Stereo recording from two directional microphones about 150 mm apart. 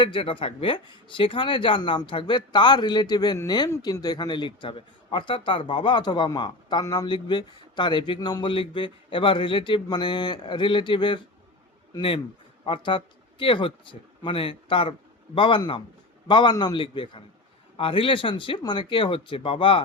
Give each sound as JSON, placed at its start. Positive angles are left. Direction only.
{"t": 0.0, "sound": "speech", "side_deg": 35}